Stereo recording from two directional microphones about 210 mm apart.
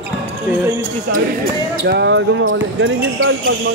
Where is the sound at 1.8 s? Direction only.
55° right (ahead or behind).